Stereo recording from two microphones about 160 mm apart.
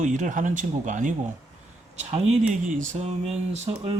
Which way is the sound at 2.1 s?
50° right (ahead or behind).